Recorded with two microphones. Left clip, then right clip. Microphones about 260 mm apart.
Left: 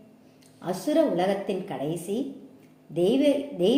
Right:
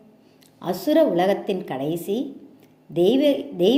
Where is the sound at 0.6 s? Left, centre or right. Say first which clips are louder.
Right 5 dB; right.